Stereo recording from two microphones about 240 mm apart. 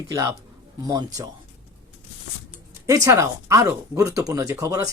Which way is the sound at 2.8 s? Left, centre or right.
Centre.